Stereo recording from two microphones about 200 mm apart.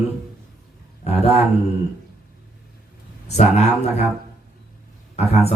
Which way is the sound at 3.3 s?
35° left (ahead or behind).